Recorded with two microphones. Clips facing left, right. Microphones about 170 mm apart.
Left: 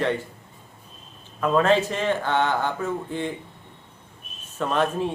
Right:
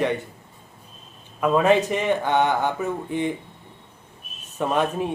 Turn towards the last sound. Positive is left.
turn(degrees=-15)  # may be behind; listen again after turning